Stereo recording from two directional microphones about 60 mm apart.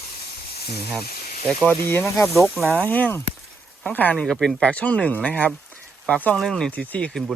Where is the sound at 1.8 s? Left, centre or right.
Left.